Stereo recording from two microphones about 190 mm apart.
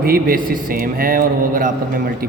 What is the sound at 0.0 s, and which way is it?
Speech, 50° right (ahead or behind).